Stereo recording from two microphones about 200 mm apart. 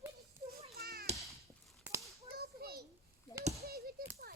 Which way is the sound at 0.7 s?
50° right (ahead or behind).